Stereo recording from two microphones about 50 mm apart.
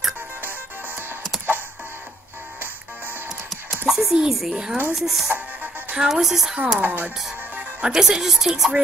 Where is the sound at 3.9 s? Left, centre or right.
Centre.